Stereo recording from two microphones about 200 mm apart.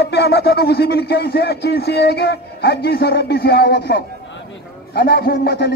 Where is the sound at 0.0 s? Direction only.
55° left (ahead or behind).